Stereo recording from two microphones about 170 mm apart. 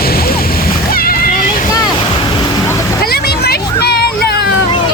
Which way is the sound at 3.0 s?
65° left (ahead or behind).